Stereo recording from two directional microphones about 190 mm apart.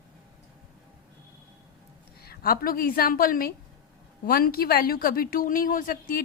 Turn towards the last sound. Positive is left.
turn(degrees=45)  # may be behind; listen again after turning